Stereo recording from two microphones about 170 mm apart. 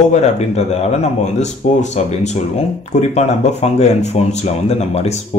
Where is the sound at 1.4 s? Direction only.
45° left (ahead or behind).